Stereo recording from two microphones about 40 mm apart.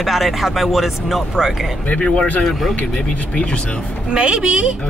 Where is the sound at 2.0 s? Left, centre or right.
Centre.